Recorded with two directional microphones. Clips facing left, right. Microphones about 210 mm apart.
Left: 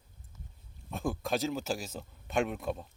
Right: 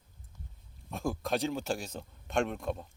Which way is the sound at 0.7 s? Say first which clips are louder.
Even; centre (ahead or behind).